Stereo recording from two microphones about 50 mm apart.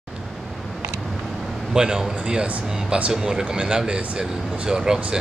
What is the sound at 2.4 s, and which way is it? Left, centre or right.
Speech, right.